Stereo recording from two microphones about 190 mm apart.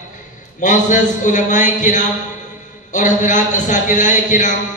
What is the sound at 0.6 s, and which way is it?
A man's voice, 40° left (ahead or behind).